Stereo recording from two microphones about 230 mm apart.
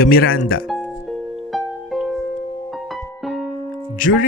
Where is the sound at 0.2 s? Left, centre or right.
Left.